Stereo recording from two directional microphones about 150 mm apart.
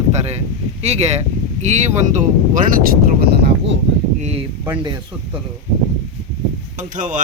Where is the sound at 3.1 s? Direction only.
90° right.